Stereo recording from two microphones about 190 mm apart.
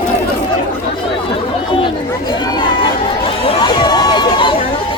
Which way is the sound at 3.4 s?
20° left (ahead or behind).